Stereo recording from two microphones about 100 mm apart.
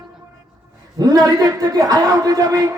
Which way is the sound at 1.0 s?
40° right (ahead or behind).